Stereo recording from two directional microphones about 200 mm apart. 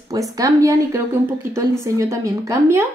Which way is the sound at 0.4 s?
15° right (ahead or behind).